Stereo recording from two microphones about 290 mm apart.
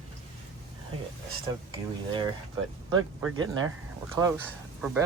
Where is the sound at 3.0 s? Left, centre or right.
Centre.